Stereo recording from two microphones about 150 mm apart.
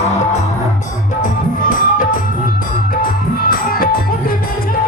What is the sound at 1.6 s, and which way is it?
Music, 60° left (ahead or behind).